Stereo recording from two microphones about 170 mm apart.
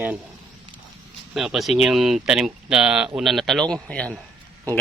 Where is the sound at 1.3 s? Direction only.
Centre (ahead or behind).